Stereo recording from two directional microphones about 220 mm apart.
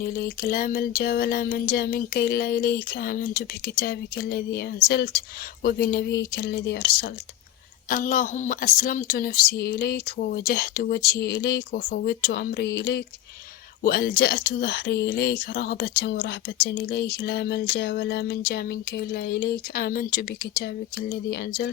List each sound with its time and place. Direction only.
0.0 s speech: 40° left (ahead or behind)